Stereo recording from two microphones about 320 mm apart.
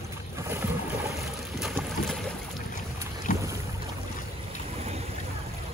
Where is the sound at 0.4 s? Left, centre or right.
Centre.